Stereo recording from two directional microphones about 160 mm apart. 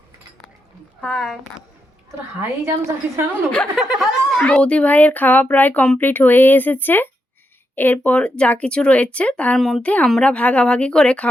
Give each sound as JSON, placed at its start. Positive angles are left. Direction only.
{"t": 1.0, "sound": "a woman's voice", "side_deg": 0}
{"t": 2.4, "sound": "a woman's voice", "side_deg": -15}
{"t": 3.8, "sound": "speech", "side_deg": 0}